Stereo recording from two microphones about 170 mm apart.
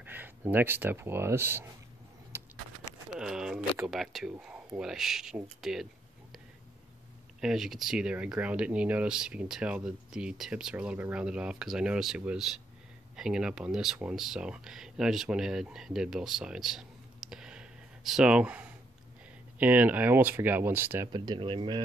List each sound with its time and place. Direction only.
0.0 s speech: 10° right (ahead or behind)
2.3 s vehicle: 15° right (ahead or behind)
3.2 s a sound: 5° right (ahead or behind)
3.8 s speech: centre (ahead or behind)
7.3 s speech: centre (ahead or behind)
21.1 s speech: 25° right (ahead or behind)